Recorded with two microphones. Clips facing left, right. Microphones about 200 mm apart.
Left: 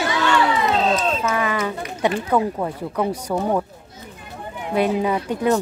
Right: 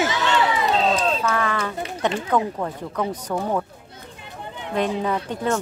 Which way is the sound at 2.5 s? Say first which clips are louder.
Left 3 dB; 10° left (ahead or behind).